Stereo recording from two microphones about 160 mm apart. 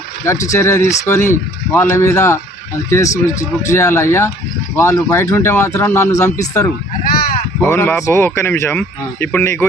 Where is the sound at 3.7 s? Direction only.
20° left (ahead or behind).